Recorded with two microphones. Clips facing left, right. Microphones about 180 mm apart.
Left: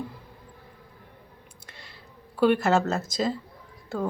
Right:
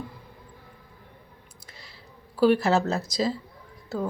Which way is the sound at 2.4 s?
5° right (ahead or behind).